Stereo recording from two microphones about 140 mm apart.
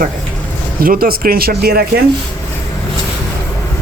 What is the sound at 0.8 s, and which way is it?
Speech, 90° right.